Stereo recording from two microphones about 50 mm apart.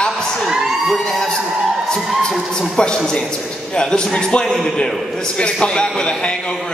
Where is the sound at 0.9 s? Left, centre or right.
Centre.